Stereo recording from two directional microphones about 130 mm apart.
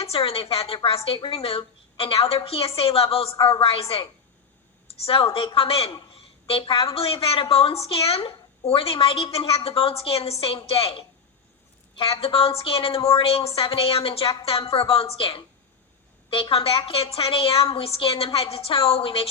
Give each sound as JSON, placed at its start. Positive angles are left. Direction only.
{"t": 0.0, "sound": "a woman's voice", "side_deg": 50}